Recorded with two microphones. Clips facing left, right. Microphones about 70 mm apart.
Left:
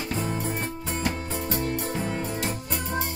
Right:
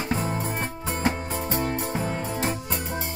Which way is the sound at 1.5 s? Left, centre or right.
Right.